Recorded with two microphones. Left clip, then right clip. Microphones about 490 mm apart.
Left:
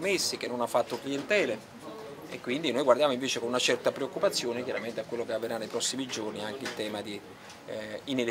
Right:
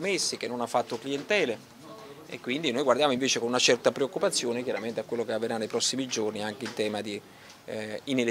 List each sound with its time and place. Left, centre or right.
0.0 s speech: right